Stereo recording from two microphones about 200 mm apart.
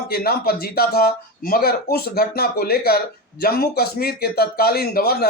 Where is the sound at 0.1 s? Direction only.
50° left (ahead or behind).